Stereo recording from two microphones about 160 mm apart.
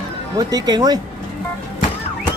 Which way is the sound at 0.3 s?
25° right (ahead or behind).